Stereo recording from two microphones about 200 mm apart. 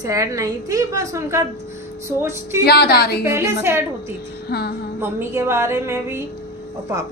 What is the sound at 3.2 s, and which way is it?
Speech, 15° right (ahead or behind).